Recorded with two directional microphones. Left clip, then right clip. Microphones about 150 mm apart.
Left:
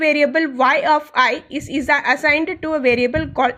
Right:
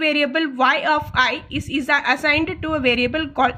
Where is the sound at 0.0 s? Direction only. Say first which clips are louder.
Left 3 dB; 30° left (ahead or behind).